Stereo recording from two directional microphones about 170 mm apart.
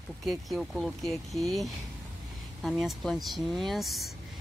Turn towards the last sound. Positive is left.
turn(degrees=0)  # may be behind; listen again after turning